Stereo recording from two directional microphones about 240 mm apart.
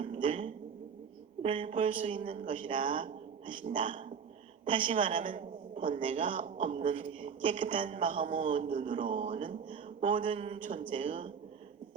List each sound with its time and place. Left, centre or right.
0.0 s a sound: right
1.4 s a woman's voice: right
5.2 s a man's voice: right